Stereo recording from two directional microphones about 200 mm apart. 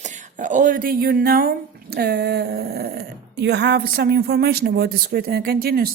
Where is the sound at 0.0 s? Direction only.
40° right (ahead or behind).